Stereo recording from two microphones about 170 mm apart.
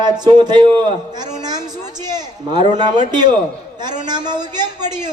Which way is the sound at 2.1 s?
25° right (ahead or behind).